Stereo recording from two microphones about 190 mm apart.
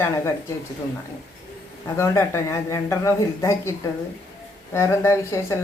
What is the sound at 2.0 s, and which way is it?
Speech, 15° left (ahead or behind).